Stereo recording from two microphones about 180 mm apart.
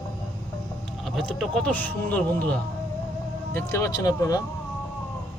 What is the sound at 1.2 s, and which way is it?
A man's voice, centre (ahead or behind).